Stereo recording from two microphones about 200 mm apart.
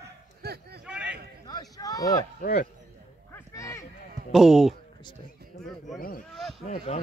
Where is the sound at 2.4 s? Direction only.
45° left (ahead or behind).